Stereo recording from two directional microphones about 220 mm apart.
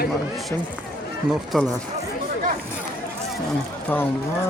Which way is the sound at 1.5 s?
Centre (ahead or behind).